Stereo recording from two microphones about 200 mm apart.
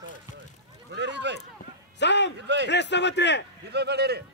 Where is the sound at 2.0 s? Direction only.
60° left (ahead or behind).